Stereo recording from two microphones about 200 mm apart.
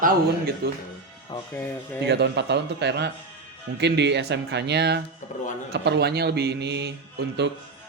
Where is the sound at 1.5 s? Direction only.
10° left (ahead or behind).